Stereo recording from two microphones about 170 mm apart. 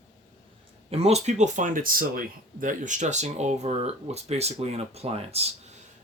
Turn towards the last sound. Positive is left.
turn(degrees=-35)  # may be behind; listen again after turning